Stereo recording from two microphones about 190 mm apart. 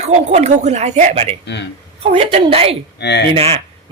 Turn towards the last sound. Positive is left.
turn(degrees=-30)  # may be behind; listen again after turning